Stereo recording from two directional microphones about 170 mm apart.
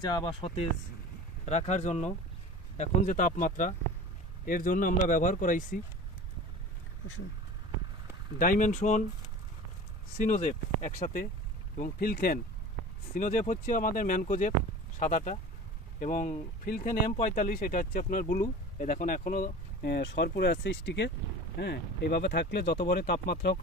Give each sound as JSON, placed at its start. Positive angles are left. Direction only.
{"t": 0.0, "sound": "speech", "side_deg": 25}
{"t": 8.4, "sound": "speech", "side_deg": 50}
{"t": 10.1, "sound": "speech", "side_deg": 50}
{"t": 21.5, "sound": "speech", "side_deg": 70}